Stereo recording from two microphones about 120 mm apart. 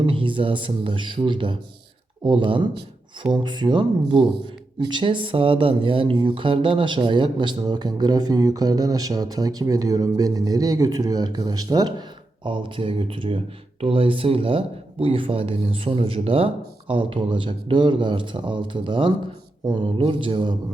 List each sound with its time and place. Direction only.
0.0 s speech: 45° right (ahead or behind)